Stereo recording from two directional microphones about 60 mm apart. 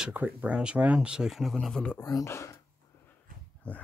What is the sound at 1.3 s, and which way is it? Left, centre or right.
Speech, centre.